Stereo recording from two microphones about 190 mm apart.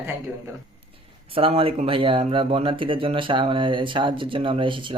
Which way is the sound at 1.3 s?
30° right (ahead or behind).